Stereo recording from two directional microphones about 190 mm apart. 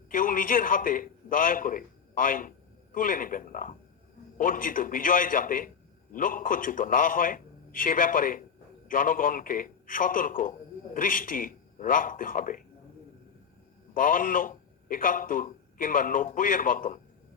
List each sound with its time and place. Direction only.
0.1 s a man's voice: 45° left (ahead or behind)
13.9 s a man's voice: 45° left (ahead or behind)